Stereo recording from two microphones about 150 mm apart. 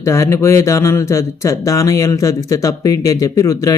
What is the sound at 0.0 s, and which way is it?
Speech, 20° left (ahead or behind).